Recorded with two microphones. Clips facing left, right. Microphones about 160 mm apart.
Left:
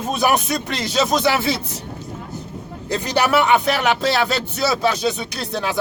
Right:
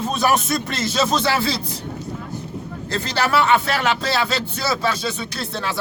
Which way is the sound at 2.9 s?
15° left (ahead or behind).